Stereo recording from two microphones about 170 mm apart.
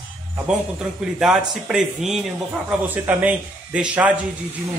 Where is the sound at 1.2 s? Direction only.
5° right (ahead or behind).